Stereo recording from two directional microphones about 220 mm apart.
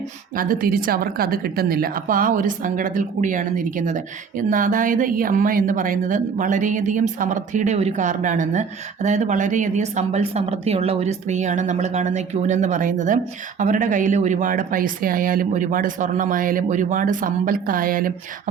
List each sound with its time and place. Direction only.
0.3 s a woman's voice: 40° right (ahead or behind)